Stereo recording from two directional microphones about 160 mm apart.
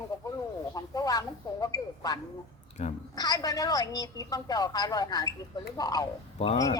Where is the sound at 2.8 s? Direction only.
40° left (ahead or behind).